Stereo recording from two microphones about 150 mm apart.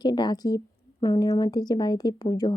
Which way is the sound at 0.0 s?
30° left (ahead or behind).